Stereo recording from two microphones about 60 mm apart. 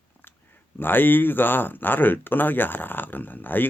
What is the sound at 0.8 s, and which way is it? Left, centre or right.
Speech, left.